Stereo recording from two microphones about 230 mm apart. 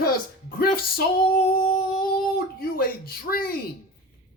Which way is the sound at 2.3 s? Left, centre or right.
Left.